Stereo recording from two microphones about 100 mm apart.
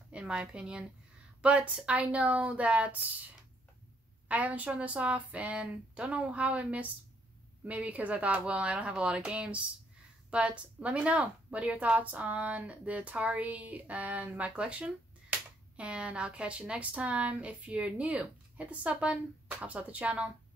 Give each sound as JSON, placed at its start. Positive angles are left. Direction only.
{"t": 0.1, "sound": "a woman's voice", "side_deg": -10}
{"t": 4.3, "sound": "a woman's voice", "side_deg": -15}